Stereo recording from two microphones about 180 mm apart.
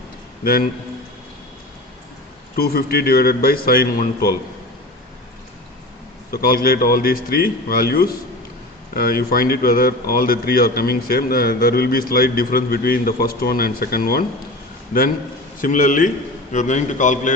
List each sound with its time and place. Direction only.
2.6 s a man's voice: 60° left (ahead or behind)
6.3 s a man's voice: 55° left (ahead or behind)
15.6 s a man's voice: 45° left (ahead or behind)